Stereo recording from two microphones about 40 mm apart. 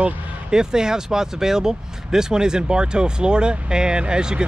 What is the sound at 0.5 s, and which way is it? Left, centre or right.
Speech, centre.